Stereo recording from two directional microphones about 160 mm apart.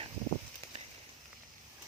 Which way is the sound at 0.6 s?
15° left (ahead or behind).